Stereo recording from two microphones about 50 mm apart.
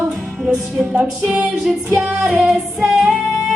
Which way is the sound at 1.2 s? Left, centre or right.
Centre.